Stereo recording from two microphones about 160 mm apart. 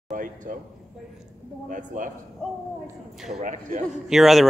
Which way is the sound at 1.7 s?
55° right (ahead or behind).